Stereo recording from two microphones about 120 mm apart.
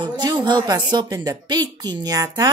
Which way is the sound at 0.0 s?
40° right (ahead or behind).